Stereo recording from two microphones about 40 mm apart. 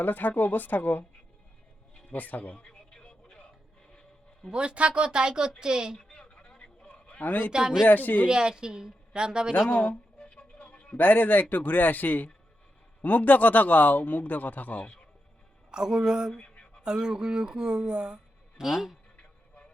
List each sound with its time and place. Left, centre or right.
0.0 s a man's voice: left
2.0 s speech: left
2.6 s a sound: left
4.5 s speech: right
6.0 s a sound: left
7.2 s a man's voice: left
7.5 s speech: centre
7.9 s a man's voice: left
8.3 s speech: centre
9.6 s speech: left
10.2 s music: left
10.9 s a man's voice: left
15.7 s speech: centre
18.6 s speech: centre